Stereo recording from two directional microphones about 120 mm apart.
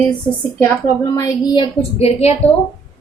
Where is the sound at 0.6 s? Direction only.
30° left (ahead or behind).